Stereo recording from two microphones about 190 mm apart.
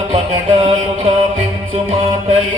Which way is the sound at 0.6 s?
35° right (ahead or behind).